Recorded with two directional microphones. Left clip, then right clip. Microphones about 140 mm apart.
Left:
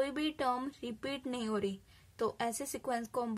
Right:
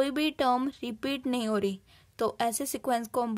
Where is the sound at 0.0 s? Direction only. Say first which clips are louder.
Right 7 dB; 45° right (ahead or behind).